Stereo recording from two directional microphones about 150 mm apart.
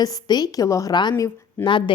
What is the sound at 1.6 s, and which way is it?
Speech, 35° left (ahead or behind).